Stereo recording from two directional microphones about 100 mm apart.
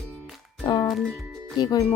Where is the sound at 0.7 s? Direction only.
45° left (ahead or behind).